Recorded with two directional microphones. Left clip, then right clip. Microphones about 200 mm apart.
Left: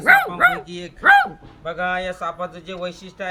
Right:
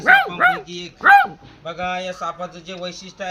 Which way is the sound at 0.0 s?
45° right (ahead or behind).